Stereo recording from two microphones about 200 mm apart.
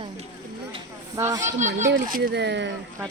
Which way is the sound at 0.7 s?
20° right (ahead or behind).